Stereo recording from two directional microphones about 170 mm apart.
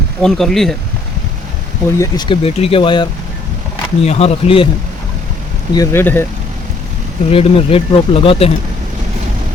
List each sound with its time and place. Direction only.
0.2 s speech: centre (ahead or behind)
2.0 s speech: 25° left (ahead or behind)
5.7 s speech: 15° left (ahead or behind)
7.3 s speech: 35° left (ahead or behind)